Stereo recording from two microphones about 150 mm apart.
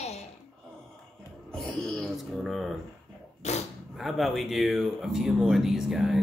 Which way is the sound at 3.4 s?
50° left (ahead or behind).